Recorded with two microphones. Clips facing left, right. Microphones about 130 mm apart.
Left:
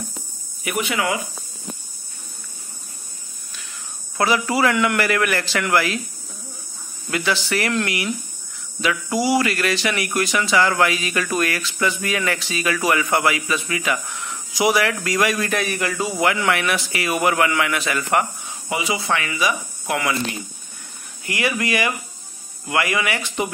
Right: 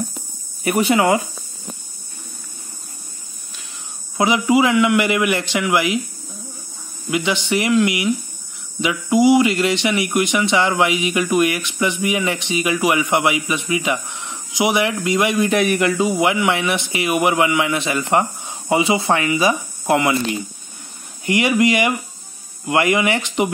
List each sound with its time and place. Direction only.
0.7 s speech: 35° right (ahead or behind)
4.2 s a man's voice: 15° right (ahead or behind)
7.1 s speech: 20° right (ahead or behind)
21.3 s speech: 20° right (ahead or behind)